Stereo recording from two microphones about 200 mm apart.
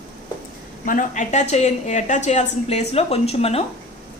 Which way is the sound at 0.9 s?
40° left (ahead or behind).